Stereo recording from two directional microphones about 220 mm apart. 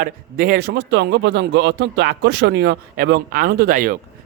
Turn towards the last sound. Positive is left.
turn(degrees=-40)  # may be behind; listen again after turning